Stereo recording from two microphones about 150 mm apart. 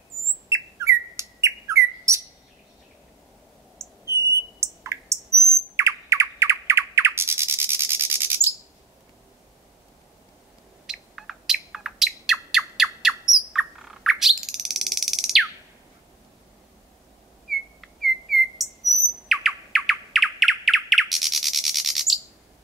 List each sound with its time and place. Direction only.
0.5 s bird: 20° right (ahead or behind)
4.0 s bird: 20° right (ahead or behind)
10.9 s bird: 5° right (ahead or behind)
17.5 s chirp: centre (ahead or behind)